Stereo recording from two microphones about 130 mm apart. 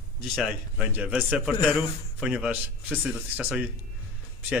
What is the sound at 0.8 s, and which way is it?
A man's voice, 10° right (ahead or behind).